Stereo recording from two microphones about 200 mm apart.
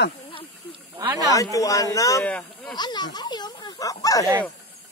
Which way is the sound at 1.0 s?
20° right (ahead or behind).